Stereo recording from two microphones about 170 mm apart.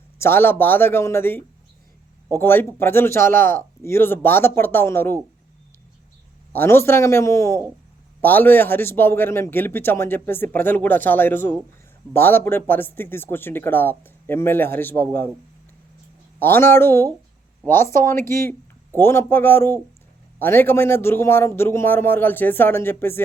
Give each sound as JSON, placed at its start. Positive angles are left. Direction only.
{"t": 0.2, "sound": "a man's voice", "side_deg": 15}
{"t": 6.5, "sound": "a man's voice", "side_deg": 15}
{"t": 16.4, "sound": "a man's voice", "side_deg": 15}